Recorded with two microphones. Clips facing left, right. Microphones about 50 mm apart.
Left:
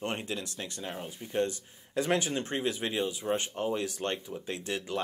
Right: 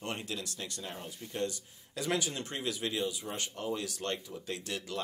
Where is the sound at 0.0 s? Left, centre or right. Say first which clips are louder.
Left 4 dB; left.